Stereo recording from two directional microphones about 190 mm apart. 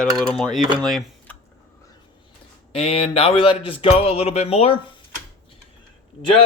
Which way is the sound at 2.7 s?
30° left (ahead or behind).